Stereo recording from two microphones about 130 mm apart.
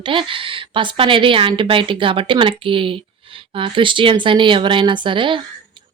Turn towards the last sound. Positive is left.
turn(degrees=-40)  # may be behind; listen again after turning